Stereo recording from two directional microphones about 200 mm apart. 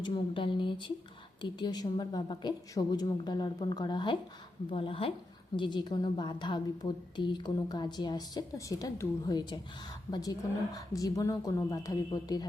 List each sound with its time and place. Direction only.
0.0 s a woman's voice: 25° left (ahead or behind)